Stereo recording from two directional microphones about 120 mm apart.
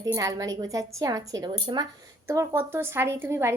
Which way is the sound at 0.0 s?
30° right (ahead or behind).